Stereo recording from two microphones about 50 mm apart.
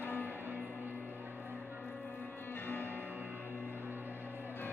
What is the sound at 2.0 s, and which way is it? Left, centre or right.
Music, left.